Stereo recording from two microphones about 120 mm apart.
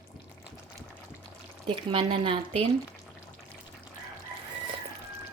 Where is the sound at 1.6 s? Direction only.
45° right (ahead or behind).